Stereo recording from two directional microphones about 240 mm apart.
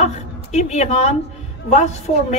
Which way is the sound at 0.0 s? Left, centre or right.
Left.